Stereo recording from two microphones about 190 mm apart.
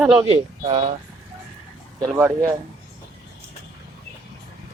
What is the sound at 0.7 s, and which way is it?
Speech, 30° right (ahead or behind).